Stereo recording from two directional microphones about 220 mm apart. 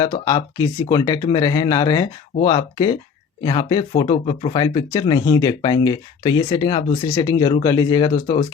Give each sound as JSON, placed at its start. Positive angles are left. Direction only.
{"t": 0.0, "sound": "speech", "side_deg": 15}